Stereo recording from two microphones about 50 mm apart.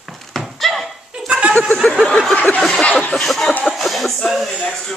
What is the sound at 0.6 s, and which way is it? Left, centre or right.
Laughter, centre.